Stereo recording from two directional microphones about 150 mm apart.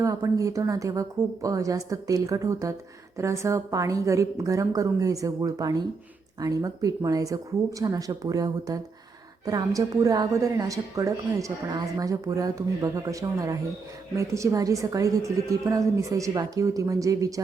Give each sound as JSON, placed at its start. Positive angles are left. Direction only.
{"t": 0.0, "sound": "a woman's voice", "side_deg": -20}